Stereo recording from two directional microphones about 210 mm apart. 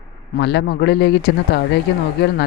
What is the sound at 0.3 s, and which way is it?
Speech, 55° left (ahead or behind).